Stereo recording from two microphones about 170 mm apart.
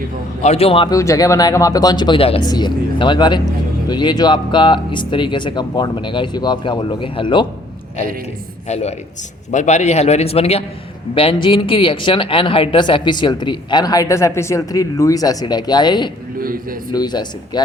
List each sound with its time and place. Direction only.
0.4 s a man's voice: 35° left (ahead or behind)
0.9 s speech: 20° left (ahead or behind)
8.6 s a man's voice: 40° left (ahead or behind); by 17.6 s 25° left (ahead or behind)